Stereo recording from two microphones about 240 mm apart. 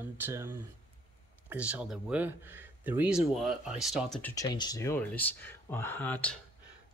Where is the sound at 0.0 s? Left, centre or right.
Centre.